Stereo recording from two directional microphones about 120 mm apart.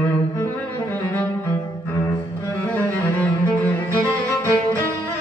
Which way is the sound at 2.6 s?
15° left (ahead or behind).